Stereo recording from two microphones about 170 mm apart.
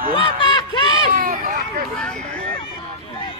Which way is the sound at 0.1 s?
30° left (ahead or behind).